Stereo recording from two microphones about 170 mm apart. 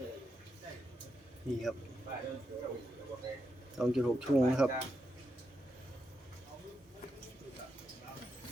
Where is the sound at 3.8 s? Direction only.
5° right (ahead or behind).